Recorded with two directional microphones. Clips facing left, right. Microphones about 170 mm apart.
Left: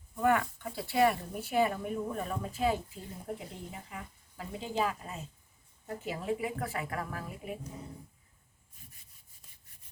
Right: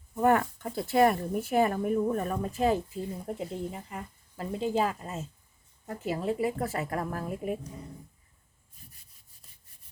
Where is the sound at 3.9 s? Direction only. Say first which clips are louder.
Right 4 dB; 45° right (ahead or behind).